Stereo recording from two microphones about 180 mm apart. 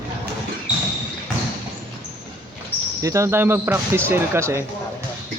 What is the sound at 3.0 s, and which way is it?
Speech, 15° right (ahead or behind).